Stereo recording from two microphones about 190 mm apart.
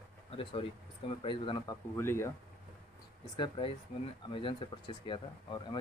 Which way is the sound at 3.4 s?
25° left (ahead or behind).